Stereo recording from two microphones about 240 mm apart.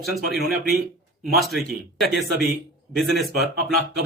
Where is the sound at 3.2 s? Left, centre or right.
Right.